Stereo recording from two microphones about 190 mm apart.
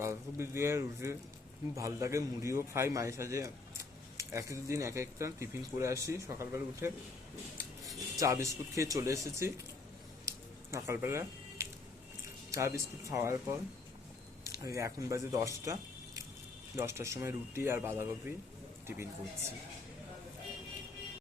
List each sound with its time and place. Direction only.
0.0 s a man's voice: 15° right (ahead or behind)
10.2 s a sound: 15° right (ahead or behind)
12.5 s a man's voice: 15° right (ahead or behind)